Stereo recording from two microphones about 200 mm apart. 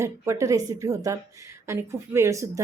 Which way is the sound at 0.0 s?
15° right (ahead or behind).